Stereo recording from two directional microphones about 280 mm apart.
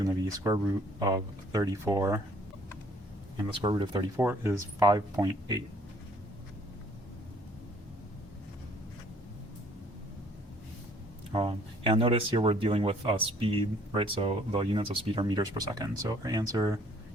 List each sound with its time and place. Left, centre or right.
0.0 s speech: centre
3.6 s speech: centre
11.3 s speech: centre